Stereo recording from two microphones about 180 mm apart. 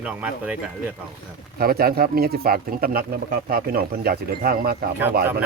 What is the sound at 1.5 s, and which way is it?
Speech, 55° right (ahead or behind).